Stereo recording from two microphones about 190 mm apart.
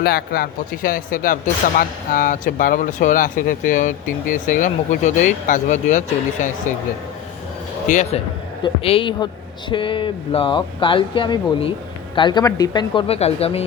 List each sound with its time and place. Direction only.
0.0 s speech: 55° left (ahead or behind)
7.9 s a man's voice: 40° left (ahead or behind)
8.6 s a man's voice: 30° left (ahead or behind)